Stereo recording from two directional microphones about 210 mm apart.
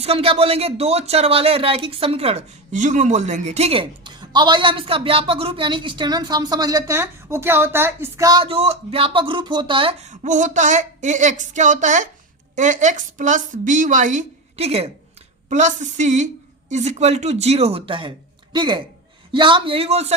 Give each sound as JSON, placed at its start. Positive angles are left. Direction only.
{"t": 0.0, "sound": "a woman's voice", "side_deg": -30}